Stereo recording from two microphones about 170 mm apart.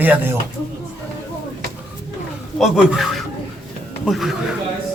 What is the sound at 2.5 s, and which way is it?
Speech, centre (ahead or behind).